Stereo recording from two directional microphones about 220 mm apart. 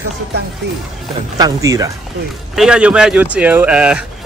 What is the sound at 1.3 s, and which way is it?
Speech, 15° right (ahead or behind).